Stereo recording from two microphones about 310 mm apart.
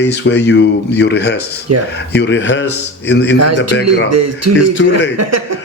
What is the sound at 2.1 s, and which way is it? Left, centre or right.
Speech, left.